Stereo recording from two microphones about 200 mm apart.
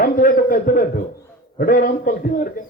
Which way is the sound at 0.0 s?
45° left (ahead or behind).